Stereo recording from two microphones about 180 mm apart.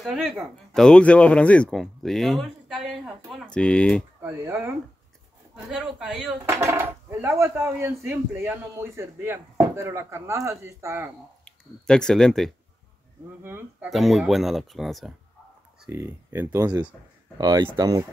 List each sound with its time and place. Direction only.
0.0 s speech: centre (ahead or behind)
4.2 s speech: 15° right (ahead or behind)
5.7 s speech: 5° right (ahead or behind)
6.5 s speech: 15° right (ahead or behind)
11.4 s speech: 5° left (ahead or behind)
13.4 s speech: 10° right (ahead or behind)
13.8 s speech: centre (ahead or behind)
15.8 s speech: 10° right (ahead or behind)